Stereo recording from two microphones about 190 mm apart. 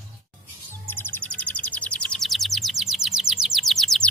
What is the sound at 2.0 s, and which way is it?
Bird, centre (ahead or behind).